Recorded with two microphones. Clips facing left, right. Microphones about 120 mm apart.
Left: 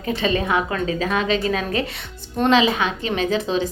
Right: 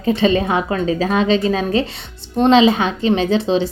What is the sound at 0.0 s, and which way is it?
A woman's voice, 30° right (ahead or behind).